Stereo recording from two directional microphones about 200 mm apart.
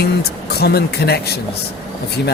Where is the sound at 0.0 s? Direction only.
55° left (ahead or behind).